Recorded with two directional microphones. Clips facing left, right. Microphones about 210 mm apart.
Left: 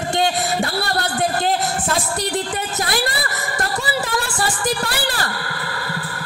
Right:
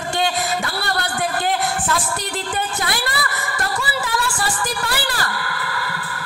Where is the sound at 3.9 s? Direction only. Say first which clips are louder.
Left 1 dB; 35° left (ahead or behind).